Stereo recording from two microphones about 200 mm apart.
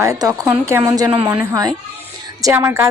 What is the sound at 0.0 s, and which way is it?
A child's voice, 15° right (ahead or behind).